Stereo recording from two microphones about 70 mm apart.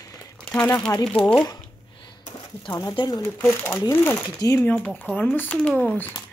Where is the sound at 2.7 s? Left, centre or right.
Left.